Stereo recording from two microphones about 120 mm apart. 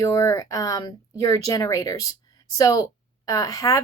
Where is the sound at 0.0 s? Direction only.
25° left (ahead or behind).